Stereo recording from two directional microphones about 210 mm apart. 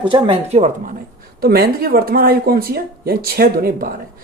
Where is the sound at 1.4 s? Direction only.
45° right (ahead or behind).